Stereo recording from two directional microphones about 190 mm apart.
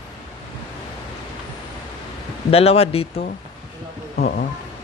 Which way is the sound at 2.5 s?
30° left (ahead or behind).